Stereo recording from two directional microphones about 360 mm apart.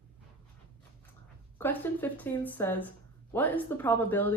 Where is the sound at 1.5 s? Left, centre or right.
Centre.